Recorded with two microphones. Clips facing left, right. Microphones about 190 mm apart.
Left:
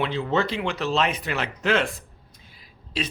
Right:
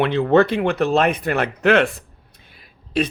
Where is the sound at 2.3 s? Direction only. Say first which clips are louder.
Right 1 dB; 65° right (ahead or behind).